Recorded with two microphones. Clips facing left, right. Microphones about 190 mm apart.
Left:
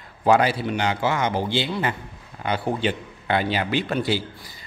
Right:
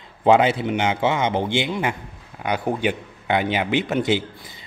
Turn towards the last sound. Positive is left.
turn(degrees=-20)  # may be behind; listen again after turning